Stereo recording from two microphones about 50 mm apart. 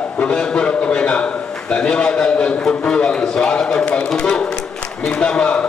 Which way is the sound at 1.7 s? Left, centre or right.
Centre.